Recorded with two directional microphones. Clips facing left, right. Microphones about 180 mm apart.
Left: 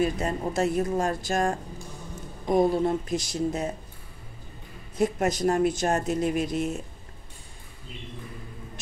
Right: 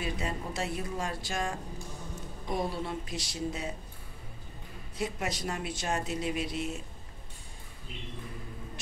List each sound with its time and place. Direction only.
0.0 s speech: 45° left (ahead or behind)
4.9 s speech: 45° left (ahead or behind)